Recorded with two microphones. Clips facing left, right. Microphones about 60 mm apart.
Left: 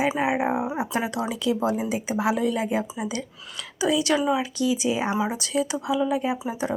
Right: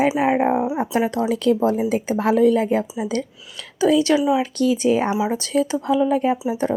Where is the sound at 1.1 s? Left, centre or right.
Right.